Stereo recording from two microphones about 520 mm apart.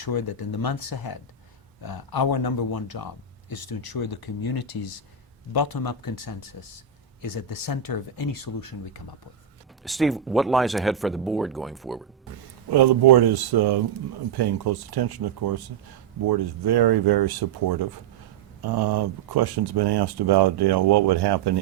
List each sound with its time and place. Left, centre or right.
0.0 s speech: left
9.8 s speech: centre
12.7 s speech: right